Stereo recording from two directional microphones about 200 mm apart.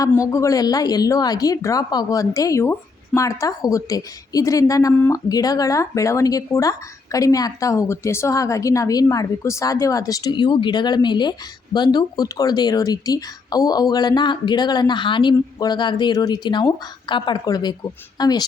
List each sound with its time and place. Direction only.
0.3 s speech: 15° left (ahead or behind)